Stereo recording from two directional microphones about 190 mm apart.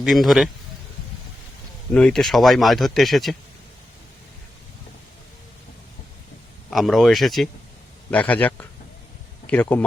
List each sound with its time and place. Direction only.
0.0 s speech: centre (ahead or behind)
1.9 s speech: 5° left (ahead or behind)
6.7 s a man's voice: centre (ahead or behind)